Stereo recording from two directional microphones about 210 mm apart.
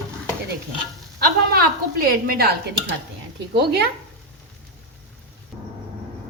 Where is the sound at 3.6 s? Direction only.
50° right (ahead or behind).